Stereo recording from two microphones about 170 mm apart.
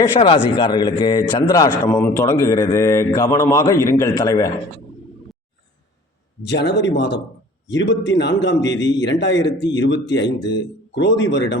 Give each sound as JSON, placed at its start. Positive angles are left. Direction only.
{"t": 0.0, "sound": "speech", "side_deg": 30}
{"t": 6.4, "sound": "a man's voice", "side_deg": 90}
{"t": 10.2, "sound": "speech", "side_deg": 25}
{"t": 10.9, "sound": "a man's voice", "side_deg": 90}